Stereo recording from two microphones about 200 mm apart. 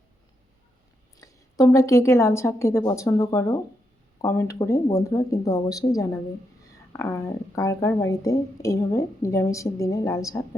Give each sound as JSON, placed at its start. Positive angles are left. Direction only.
{"t": 1.1, "sound": "a woman's voice", "side_deg": 15}